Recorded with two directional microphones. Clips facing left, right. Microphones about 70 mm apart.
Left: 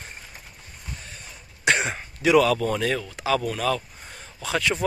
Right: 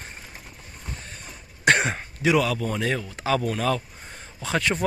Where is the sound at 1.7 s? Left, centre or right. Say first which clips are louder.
Right 2 dB; right.